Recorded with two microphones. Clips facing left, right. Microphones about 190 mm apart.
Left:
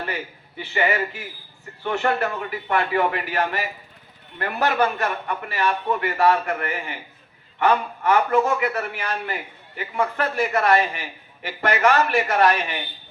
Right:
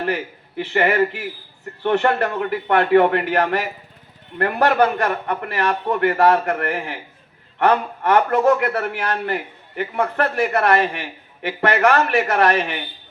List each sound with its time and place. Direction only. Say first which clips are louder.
0.0 s a man's voice: right 7 dB; 65° right (ahead or behind)
5.3 s a man's voice: right 3 dB; 65° right (ahead or behind)
8.1 s a man's voice: right 4 dB; 60° right (ahead or behind)